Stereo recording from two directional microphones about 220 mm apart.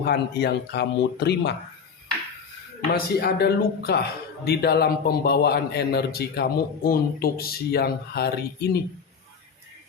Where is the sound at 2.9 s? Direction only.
45° left (ahead or behind).